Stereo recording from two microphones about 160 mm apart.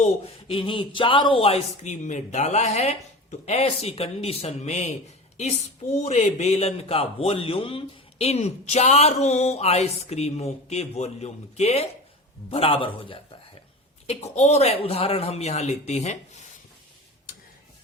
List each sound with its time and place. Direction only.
0.0 s a man's voice: 35° left (ahead or behind)
6.0 s a man's voice: 45° left (ahead or behind)